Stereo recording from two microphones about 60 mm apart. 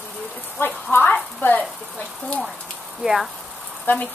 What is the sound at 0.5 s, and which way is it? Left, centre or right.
Speech, left.